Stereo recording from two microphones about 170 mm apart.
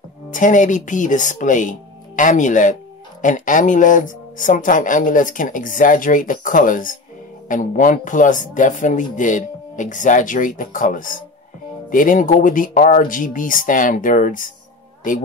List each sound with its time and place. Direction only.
0.3 s speech: 50° left (ahead or behind)